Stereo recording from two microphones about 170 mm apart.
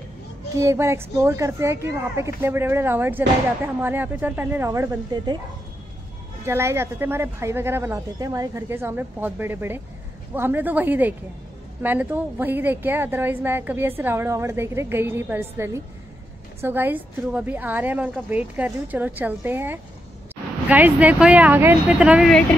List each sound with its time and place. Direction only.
0.6 s a woman's voice: 15° right (ahead or behind)
6.4 s a woman's voice: 15° right (ahead or behind)